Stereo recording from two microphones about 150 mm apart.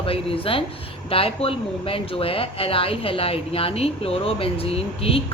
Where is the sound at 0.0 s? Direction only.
40° left (ahead or behind).